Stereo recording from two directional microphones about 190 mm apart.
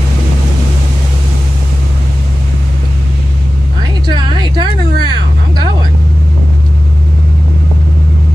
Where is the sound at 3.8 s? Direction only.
25° right (ahead or behind).